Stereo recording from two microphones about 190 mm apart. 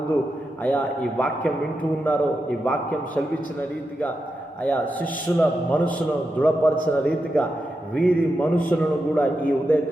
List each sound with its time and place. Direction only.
0.6 s a man's voice: 5° left (ahead or behind)
4.6 s a man's voice: 5° left (ahead or behind)